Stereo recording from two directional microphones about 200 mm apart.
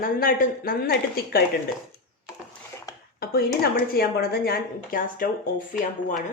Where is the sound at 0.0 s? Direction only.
45° left (ahead or behind).